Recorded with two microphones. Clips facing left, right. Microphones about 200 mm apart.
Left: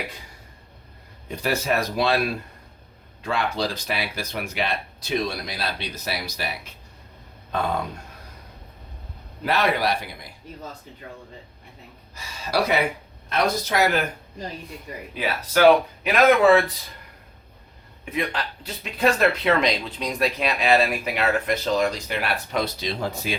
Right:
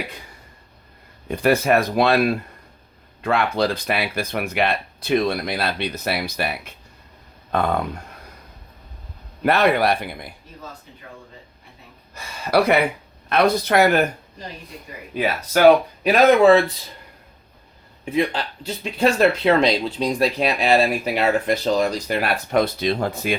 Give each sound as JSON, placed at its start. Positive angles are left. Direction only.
{"t": 1.3, "sound": "speech", "side_deg": -55}
{"t": 9.4, "sound": "speech", "side_deg": -55}
{"t": 12.1, "sound": "speech", "side_deg": -55}
{"t": 16.0, "sound": "a man's voice", "side_deg": -25}
{"t": 18.0, "sound": "a man's voice", "side_deg": -30}